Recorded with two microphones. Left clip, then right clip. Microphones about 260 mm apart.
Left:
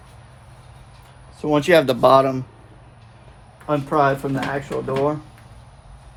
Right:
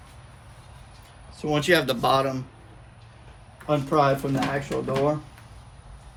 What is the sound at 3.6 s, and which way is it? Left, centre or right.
Speech, centre.